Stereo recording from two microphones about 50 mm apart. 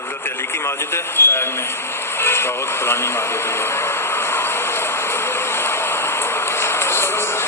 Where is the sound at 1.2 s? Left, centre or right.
Left.